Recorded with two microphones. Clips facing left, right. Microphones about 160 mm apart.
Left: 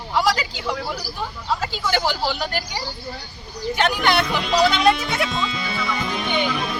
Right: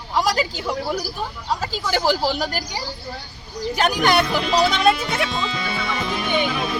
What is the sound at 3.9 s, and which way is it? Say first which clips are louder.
Speech: right 2 dB; 45° right (ahead or behind).